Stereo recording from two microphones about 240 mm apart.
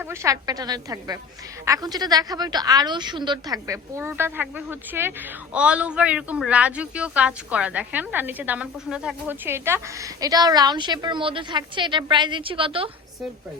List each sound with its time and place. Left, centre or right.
0.0 s a woman's voice: centre